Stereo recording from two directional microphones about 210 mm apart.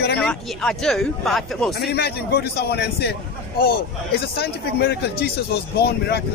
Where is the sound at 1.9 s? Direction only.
50° left (ahead or behind).